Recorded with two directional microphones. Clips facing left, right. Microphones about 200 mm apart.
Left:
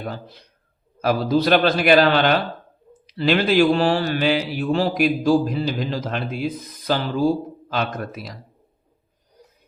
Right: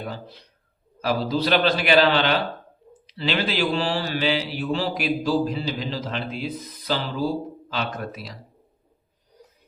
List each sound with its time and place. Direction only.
0.0 s speech: 45° left (ahead or behind)